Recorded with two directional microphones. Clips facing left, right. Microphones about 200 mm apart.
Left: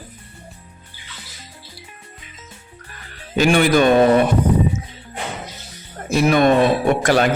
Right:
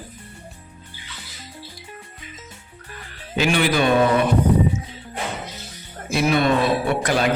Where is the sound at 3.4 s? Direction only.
45° left (ahead or behind).